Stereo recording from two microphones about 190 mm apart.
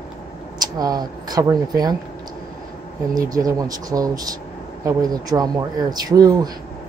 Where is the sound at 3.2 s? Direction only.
20° right (ahead or behind).